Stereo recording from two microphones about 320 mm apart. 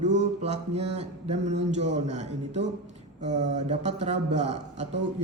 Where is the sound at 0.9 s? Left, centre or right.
Right.